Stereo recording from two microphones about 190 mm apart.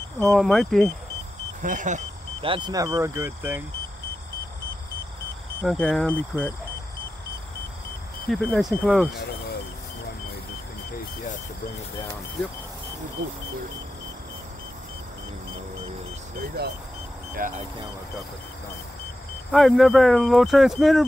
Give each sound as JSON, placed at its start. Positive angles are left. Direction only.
{"t": 0.3, "sound": "speech", "side_deg": 0}
{"t": 1.6, "sound": "speech", "side_deg": -40}
{"t": 2.4, "sound": "speech", "side_deg": -25}
{"t": 5.7, "sound": "speech", "side_deg": 5}
{"t": 8.3, "sound": "speech", "side_deg": 5}
{"t": 16.3, "sound": "speech", "side_deg": -55}
{"t": 19.5, "sound": "speech", "side_deg": 0}